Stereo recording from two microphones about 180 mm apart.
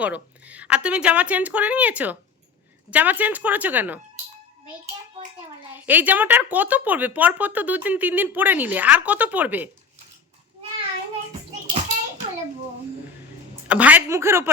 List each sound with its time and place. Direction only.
0.0 s speech: 10° right (ahead or behind)
5.7 s speech: 10° right (ahead or behind)
11.3 s a sound: 35° right (ahead or behind)
13.7 s speech: 10° right (ahead or behind)